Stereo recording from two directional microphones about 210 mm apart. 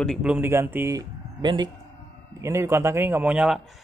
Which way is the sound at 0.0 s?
Centre (ahead or behind).